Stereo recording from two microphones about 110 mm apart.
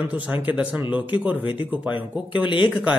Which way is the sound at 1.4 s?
55° left (ahead or behind).